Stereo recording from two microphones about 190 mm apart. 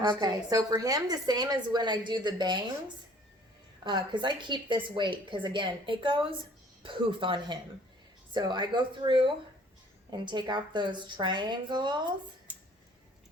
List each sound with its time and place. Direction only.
0.0 s a woman's voice: 20° right (ahead or behind)
3.8 s a woman's voice: 25° right (ahead or behind)